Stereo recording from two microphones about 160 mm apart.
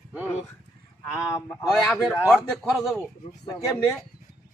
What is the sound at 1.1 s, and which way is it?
Speech, 20° left (ahead or behind).